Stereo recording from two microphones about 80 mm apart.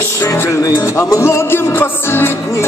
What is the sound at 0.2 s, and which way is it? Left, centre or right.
Music, left.